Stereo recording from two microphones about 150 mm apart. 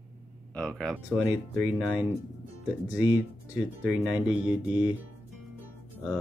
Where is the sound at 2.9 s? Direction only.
10° right (ahead or behind).